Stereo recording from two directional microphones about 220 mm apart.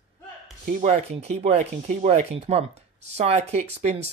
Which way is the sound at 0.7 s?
35° right (ahead or behind).